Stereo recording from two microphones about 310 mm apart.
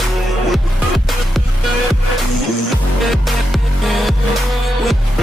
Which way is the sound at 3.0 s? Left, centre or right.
Centre.